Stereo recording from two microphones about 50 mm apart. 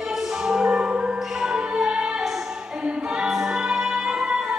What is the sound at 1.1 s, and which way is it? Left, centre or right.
Music, centre.